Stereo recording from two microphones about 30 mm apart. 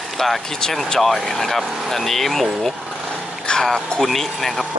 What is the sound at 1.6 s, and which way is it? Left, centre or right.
Speech, centre.